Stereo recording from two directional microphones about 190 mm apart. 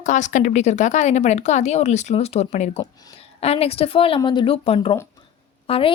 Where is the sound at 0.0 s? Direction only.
40° left (ahead or behind).